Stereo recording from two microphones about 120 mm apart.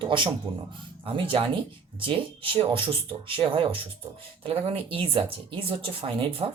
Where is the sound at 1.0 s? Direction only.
45° right (ahead or behind).